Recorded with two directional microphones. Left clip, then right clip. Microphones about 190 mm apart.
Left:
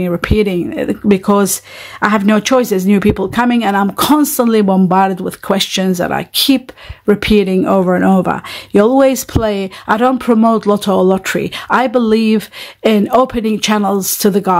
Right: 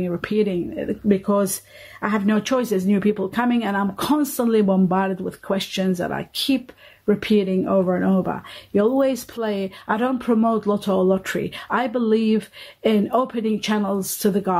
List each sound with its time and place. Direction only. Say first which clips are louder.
0.0 s speech: left 8 dB; 30° left (ahead or behind)